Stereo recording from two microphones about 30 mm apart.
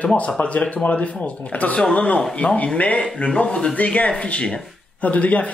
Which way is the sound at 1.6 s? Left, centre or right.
Left.